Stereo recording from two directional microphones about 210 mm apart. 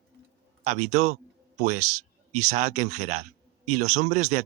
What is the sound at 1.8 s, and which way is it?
Speech, 90° right.